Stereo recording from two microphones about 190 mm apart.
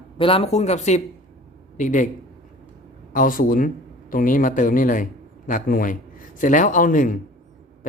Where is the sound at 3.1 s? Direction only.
45° left (ahead or behind).